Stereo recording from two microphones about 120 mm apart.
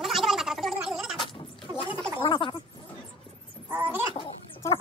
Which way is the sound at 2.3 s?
45° left (ahead or behind).